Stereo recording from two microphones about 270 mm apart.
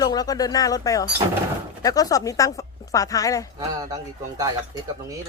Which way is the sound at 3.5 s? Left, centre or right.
Centre.